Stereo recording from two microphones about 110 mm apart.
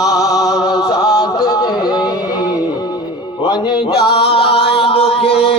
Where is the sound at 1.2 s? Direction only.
40° left (ahead or behind).